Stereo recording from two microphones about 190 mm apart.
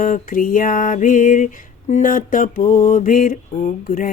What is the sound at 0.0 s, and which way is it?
Music, 45° left (ahead or behind).